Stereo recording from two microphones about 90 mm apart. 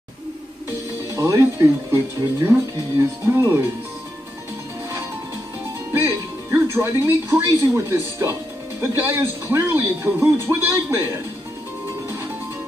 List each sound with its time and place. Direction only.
1.1 s speech: 35° right (ahead or behind)
5.9 s a man's voice: 25° right (ahead or behind)